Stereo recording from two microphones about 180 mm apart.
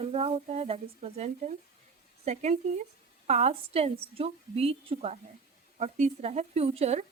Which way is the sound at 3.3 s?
35° right (ahead or behind).